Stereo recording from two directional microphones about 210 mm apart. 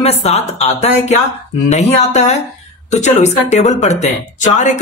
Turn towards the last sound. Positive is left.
turn(degrees=35)  # may be behind; listen again after turning